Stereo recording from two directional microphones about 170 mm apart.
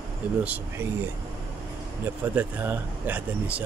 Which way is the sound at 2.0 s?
15° right (ahead or behind).